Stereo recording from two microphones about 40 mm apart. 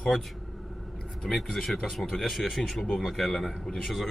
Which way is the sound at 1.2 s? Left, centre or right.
Centre.